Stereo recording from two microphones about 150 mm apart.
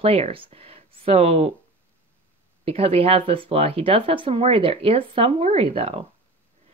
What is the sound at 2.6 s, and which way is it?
Speech, 40° right (ahead or behind).